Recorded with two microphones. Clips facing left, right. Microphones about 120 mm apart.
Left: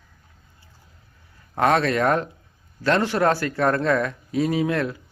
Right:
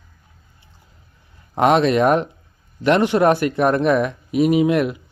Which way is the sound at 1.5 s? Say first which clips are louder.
Right 5 dB; 20° right (ahead or behind).